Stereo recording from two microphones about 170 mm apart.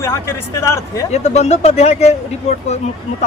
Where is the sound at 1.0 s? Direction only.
40° left (ahead or behind).